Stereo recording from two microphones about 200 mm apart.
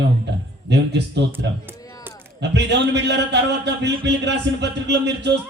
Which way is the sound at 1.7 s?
20° left (ahead or behind).